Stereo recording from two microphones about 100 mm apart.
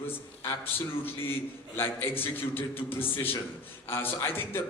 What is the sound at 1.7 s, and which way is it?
A man's voice, 25° left (ahead or behind).